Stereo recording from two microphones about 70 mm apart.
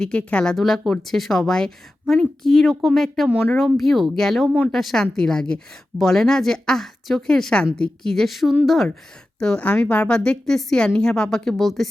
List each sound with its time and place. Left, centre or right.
0.0 s a woman's voice: centre
0.5 s speech: centre
9.4 s a woman's voice: centre